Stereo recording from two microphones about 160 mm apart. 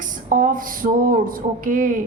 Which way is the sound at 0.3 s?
60° right (ahead or behind).